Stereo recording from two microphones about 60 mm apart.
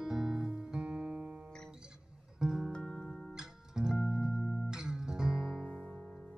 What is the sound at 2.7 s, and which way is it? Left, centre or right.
Music, centre.